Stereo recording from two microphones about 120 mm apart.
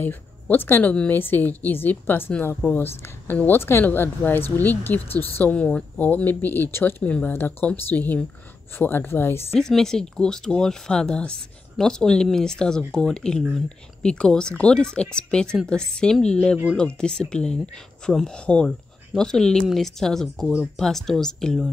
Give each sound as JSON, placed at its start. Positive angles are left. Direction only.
{"t": 0.0, "sound": "speech", "side_deg": 15}
{"t": 9.6, "sound": "speech", "side_deg": 5}